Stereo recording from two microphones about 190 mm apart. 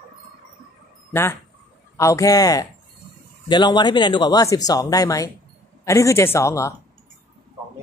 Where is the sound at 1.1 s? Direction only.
10° left (ahead or behind).